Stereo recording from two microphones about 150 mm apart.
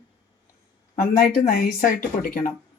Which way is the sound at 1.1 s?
85° left.